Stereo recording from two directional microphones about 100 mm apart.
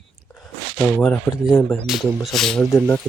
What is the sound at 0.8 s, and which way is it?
Speech, 10° left (ahead or behind).